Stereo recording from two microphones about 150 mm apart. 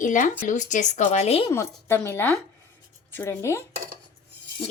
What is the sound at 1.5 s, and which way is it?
Speech, 15° left (ahead or behind).